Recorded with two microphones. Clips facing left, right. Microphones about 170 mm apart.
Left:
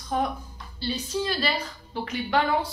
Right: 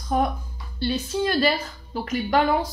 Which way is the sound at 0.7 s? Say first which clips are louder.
Right 4 dB; 55° right (ahead or behind).